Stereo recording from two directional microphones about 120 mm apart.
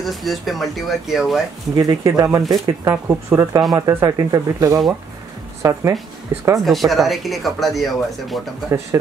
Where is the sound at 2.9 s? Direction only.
20° right (ahead or behind).